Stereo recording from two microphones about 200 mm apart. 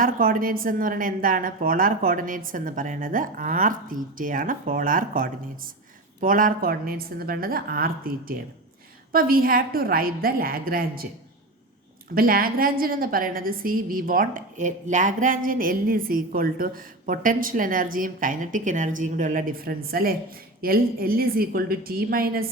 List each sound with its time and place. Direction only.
0.0 s a woman's voice: 45° right (ahead or behind)
12.1 s a woman's voice: 45° right (ahead or behind)